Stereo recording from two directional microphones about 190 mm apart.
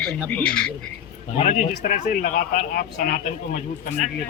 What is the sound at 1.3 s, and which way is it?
A man's voice, 35° left (ahead or behind).